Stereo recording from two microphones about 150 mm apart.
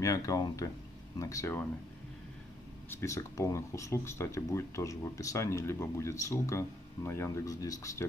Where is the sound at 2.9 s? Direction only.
20° left (ahead or behind).